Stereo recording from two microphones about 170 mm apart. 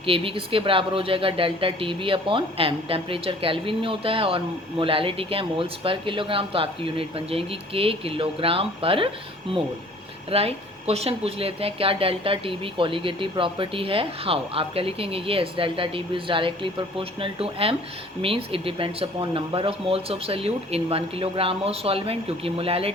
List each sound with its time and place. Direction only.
0.0 s speech: 30° right (ahead or behind)
10.3 s speech: 35° right (ahead or behind)